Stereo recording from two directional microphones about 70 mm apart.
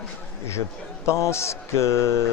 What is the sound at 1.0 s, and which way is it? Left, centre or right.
Speech, left.